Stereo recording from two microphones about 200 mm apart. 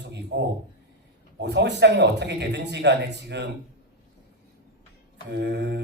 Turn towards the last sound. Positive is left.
turn(degrees=-55)  # may be behind; listen again after turning